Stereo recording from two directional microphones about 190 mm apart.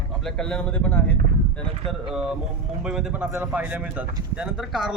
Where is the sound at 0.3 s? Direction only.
5° left (ahead or behind).